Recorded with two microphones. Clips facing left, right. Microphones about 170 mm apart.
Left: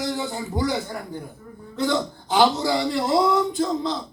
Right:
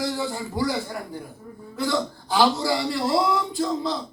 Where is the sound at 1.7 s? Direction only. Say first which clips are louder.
Left 2 dB; 20° left (ahead or behind).